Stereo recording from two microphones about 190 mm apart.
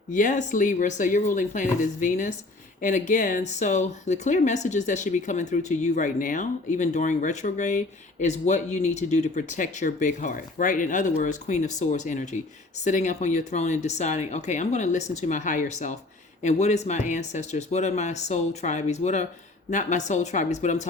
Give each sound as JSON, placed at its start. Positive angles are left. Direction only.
{"t": 0.1, "sound": "speech", "side_deg": 40}